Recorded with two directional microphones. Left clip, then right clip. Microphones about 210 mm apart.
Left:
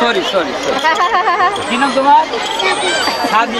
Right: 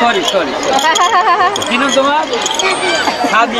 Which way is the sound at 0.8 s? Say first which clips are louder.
Right 1 dB; 25° right (ahead or behind).